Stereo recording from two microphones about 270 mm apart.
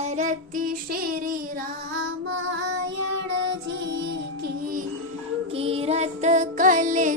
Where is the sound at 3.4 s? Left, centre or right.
Right.